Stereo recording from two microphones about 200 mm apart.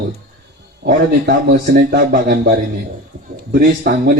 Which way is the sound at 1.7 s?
50° right (ahead or behind).